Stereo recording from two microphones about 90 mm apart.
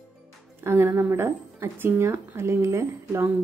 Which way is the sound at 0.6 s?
25° right (ahead or behind).